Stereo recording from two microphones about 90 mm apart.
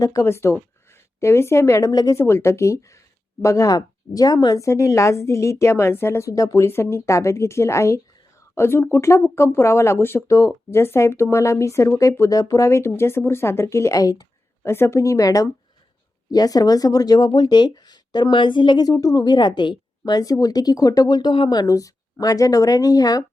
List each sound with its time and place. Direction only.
0.0 s speech: 35° left (ahead or behind)
2.1 s speech: 30° left (ahead or behind); by 4.6 s 50° left (ahead or behind)
4.6 s speech: 35° left (ahead or behind)
6.7 s speech: 30° left (ahead or behind)
14.6 s speech: 30° left (ahead or behind); by 17.2 s 45° left (ahead or behind)
17.2 s speech: 55° left (ahead or behind)